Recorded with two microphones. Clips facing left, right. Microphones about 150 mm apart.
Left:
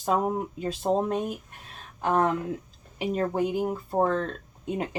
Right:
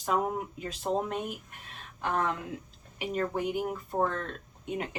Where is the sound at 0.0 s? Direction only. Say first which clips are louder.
Left 4 dB; 35° left (ahead or behind).